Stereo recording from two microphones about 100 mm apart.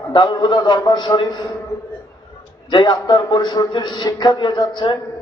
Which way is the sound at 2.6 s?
50° left (ahead or behind).